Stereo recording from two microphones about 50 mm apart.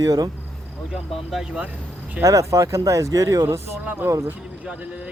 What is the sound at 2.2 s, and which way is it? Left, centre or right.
Speech, right.